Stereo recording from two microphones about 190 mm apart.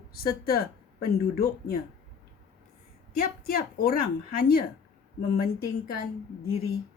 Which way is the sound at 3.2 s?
50° left (ahead or behind).